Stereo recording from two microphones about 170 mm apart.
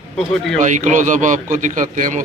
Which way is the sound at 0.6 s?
45° right (ahead or behind).